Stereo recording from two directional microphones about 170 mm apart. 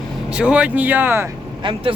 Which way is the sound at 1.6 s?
30° right (ahead or behind).